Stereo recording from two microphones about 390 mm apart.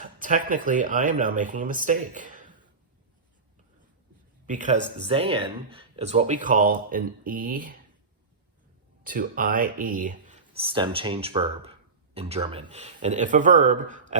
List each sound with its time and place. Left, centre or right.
0.2 s speech: centre
4.4 s speech: centre
9.0 s speech: right